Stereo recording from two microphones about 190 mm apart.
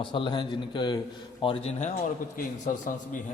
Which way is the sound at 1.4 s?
35° left (ahead or behind).